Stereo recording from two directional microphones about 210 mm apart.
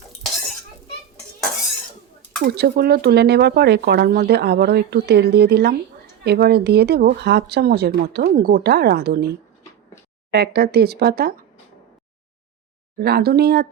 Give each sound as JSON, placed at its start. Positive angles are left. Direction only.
{"t": 2.4, "sound": "speech", "side_deg": -50}
{"t": 10.3, "sound": "speech", "side_deg": -50}
{"t": 13.0, "sound": "speech", "side_deg": -50}